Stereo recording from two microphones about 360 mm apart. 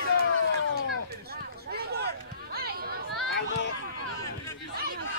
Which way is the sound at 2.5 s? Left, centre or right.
Right.